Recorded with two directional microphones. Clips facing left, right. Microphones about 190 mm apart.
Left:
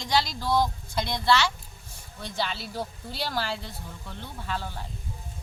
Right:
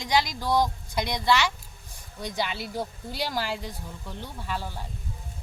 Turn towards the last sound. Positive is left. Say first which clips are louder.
# even
turn(degrees=-10)  # may be behind; listen again after turning